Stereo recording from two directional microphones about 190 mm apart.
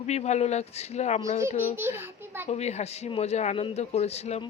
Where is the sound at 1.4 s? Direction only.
15° right (ahead or behind).